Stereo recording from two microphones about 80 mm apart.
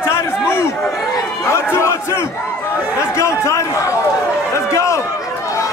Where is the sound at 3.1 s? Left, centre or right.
Left.